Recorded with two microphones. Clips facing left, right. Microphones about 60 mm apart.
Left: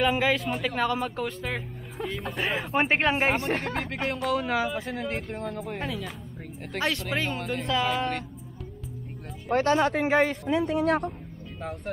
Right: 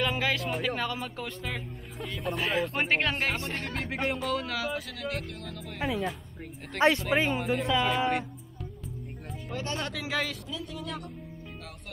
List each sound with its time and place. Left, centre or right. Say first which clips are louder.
0.0 s speech: left 5 dB; centre
2.5 s speech: left 4 dB; centre; by 3.6 s left
3.6 s speech: left 2 dB; centre
4.4 s speech: left 5 dB; left
6.7 s speech: right 5 dB; centre
7.2 s speech: right 2 dB; centre
9.7 s speech: left 12 dB; left
9.9 s speech: left 9 dB; left
10.4 s speech: left 13 dB; left